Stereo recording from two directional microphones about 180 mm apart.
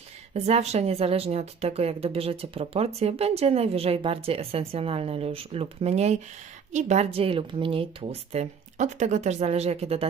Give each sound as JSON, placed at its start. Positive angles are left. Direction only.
{"t": 0.3, "sound": "a woman's voice", "side_deg": -35}